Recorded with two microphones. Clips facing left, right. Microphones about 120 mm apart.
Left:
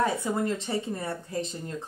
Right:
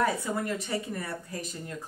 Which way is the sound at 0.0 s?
25° left (ahead or behind).